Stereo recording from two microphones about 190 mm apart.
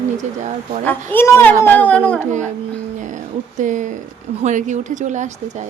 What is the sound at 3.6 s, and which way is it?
Speech, 40° right (ahead or behind).